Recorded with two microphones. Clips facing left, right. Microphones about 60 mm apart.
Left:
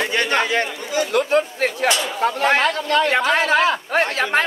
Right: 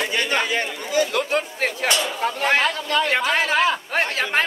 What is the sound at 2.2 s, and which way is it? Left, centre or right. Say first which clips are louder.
Speech: left 4 dB; left.